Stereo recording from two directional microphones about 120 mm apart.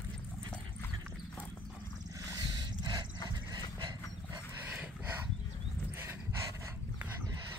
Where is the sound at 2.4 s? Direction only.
40° right (ahead or behind).